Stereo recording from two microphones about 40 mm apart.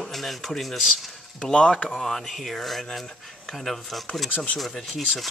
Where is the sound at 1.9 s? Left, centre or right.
Centre.